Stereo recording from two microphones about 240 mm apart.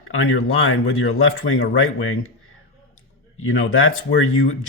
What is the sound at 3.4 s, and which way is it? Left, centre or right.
Speech, left.